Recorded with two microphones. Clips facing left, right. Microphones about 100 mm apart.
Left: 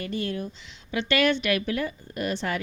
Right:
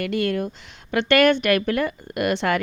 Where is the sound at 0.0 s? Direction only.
70° right (ahead or behind).